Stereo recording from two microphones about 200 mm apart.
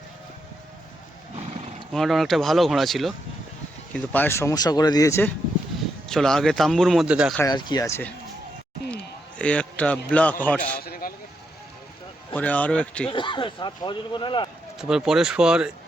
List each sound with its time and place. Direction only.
1.9 s speech: centre (ahead or behind)
6.1 s speech: 5° left (ahead or behind)
7.4 s speech: 20° left (ahead or behind)
9.4 s speech: 5° left (ahead or behind)
10.8 s a sound: 50° left (ahead or behind)
12.3 s speech: 10° left (ahead or behind)
13.1 s a man's voice: 25° left (ahead or behind)
14.8 s speech: 5° right (ahead or behind)